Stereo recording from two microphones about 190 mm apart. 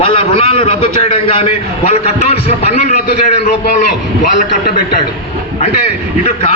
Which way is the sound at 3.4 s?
40° left (ahead or behind).